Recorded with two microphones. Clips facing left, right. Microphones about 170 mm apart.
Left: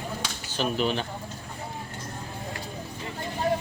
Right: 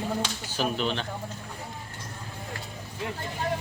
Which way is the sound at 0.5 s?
Centre (ahead or behind).